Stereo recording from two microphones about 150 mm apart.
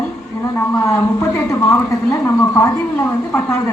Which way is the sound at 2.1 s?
20° left (ahead or behind).